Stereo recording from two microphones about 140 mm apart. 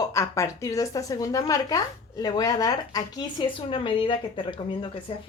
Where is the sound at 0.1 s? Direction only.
20° left (ahead or behind).